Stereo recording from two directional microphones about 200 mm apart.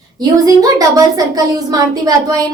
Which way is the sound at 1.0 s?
20° right (ahead or behind).